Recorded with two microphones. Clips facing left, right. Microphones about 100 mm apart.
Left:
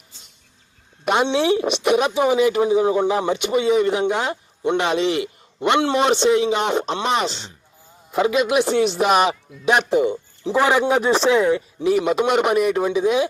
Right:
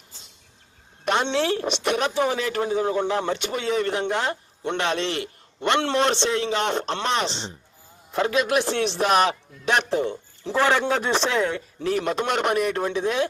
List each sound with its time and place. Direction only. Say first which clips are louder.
1.0 s speech: left 4 dB; 5° left (ahead or behind)
7.3 s speech: left 1 dB; 30° right (ahead or behind)
8.1 s speech: left 4 dB; 5° left (ahead or behind)